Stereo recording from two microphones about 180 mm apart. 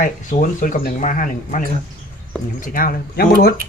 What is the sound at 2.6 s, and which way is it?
Speech, 50° left (ahead or behind).